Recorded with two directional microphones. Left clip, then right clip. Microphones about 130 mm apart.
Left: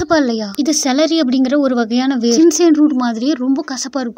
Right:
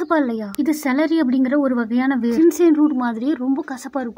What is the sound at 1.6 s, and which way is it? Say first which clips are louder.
Speech: left 4 dB; 25° left (ahead or behind).